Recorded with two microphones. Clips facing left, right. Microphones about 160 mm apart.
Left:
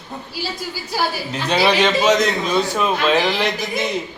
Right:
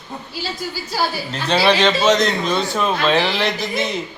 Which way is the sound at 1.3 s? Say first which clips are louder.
Right 1 dB; 15° left (ahead or behind).